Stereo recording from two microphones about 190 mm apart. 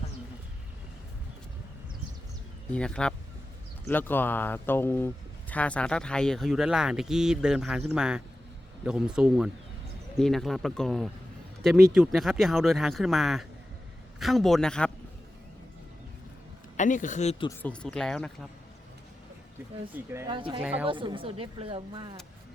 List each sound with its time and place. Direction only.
2.7 s speech: 5° left (ahead or behind)
16.7 s speech: 40° left (ahead or behind)
17.6 s speech: 5° left (ahead or behind)
19.9 s speech: 15° right (ahead or behind)
20.3 s speech: 25° right (ahead or behind)
20.6 s speech: 5° right (ahead or behind)
20.8 s speech: 25° right (ahead or behind)